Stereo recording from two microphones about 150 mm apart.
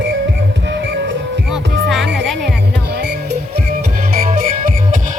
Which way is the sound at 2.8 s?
90° right.